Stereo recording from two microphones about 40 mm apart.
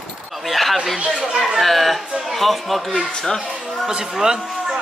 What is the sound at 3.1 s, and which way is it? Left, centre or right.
Speech, centre.